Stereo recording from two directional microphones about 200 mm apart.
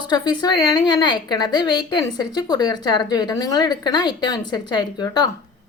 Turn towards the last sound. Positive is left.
turn(degrees=20)  # may be behind; listen again after turning